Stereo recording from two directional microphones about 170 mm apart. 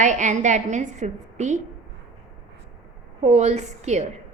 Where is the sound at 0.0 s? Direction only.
45° right (ahead or behind).